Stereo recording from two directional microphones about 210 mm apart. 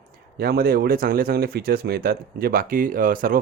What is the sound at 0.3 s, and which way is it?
A man's voice, 45° right (ahead or behind).